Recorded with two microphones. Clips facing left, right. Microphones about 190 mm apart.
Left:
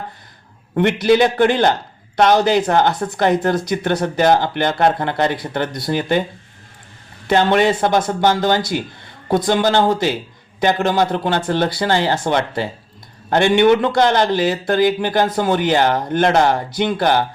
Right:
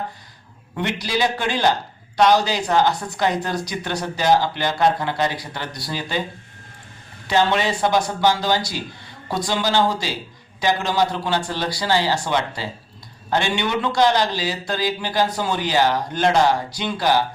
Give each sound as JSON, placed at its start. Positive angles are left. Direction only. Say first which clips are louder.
{"t": 1.0, "sound": "speech", "louder": "left 10 dB", "side_deg": 55}
{"t": 7.3, "sound": "speech", "louder": "left 5 dB", "side_deg": 55}